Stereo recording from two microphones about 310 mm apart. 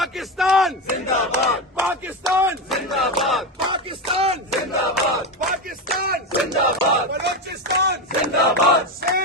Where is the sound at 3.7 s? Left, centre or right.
Centre.